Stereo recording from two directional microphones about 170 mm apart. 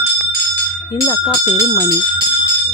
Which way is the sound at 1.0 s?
25° left (ahead or behind).